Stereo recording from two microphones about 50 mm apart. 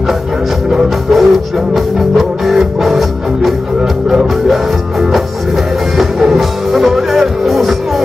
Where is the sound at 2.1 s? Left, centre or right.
Centre.